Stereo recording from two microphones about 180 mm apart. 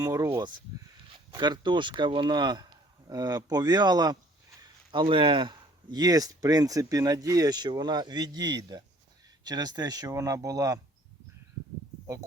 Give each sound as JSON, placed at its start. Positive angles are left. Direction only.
{"t": 0.0, "sound": "speech", "side_deg": -20}